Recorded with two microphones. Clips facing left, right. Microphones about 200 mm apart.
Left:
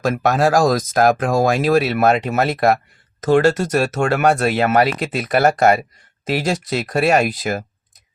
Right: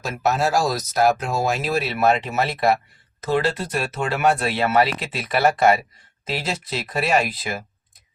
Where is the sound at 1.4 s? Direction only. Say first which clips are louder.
Left 7 dB; 45° left (ahead or behind).